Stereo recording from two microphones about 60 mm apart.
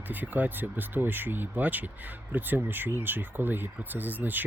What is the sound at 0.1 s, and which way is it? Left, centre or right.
Speech, right.